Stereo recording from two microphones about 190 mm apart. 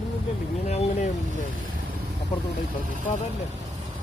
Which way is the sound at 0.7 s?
35° left (ahead or behind).